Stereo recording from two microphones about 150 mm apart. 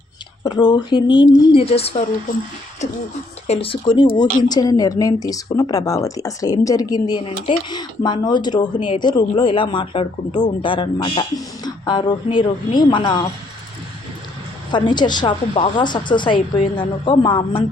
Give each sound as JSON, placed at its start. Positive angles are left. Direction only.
{"t": 0.4, "sound": "speech", "side_deg": 30}
{"t": 3.4, "sound": "speech", "side_deg": 40}
{"t": 4.4, "sound": "speech", "side_deg": 25}
{"t": 14.7, "sound": "speech", "side_deg": 30}